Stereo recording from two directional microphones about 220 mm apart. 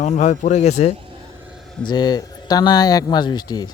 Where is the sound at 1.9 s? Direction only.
20° left (ahead or behind).